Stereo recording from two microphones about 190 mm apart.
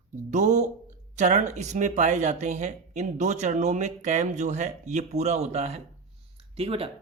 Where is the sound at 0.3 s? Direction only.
40° right (ahead or behind).